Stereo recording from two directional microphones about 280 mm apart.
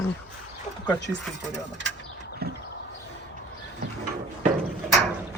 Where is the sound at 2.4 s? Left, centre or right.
Right.